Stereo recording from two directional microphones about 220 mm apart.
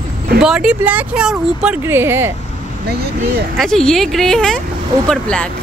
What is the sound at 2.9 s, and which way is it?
Speech, 45° right (ahead or behind).